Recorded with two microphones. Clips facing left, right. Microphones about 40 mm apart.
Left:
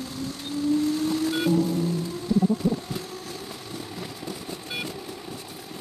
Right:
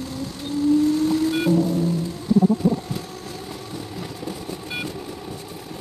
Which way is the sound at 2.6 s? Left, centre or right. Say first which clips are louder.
Right 4 dB; centre.